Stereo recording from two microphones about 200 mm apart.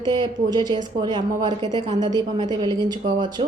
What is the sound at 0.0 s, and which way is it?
A woman's voice, 20° right (ahead or behind).